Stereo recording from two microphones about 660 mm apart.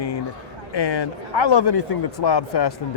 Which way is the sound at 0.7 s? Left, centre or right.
Left.